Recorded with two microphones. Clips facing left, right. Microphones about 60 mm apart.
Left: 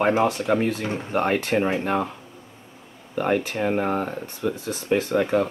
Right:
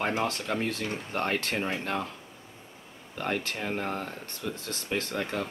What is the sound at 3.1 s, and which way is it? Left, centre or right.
Speech, centre.